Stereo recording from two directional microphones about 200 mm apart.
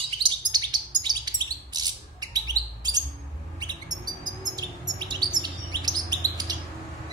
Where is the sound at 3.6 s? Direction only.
20° right (ahead or behind).